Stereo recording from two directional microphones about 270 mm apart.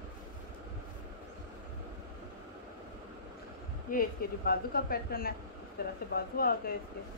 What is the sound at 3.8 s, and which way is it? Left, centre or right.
Speech, left.